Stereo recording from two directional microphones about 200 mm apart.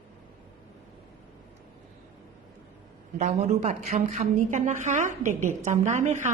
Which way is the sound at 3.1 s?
35° right (ahead or behind).